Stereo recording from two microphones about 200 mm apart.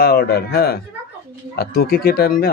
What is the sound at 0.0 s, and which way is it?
Speech, 50° left (ahead or behind).